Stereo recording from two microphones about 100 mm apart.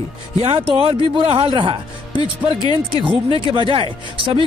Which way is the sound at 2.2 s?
50° left (ahead or behind).